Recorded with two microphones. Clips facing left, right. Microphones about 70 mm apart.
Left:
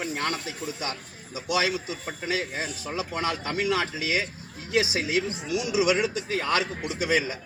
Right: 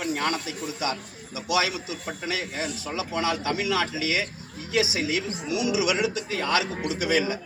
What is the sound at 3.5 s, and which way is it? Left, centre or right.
A man's voice, left.